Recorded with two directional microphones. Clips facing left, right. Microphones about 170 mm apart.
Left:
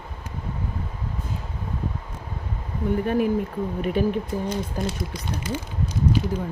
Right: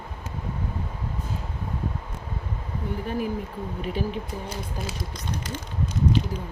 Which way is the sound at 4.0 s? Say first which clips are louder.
Left 7 dB; 55° left (ahead or behind).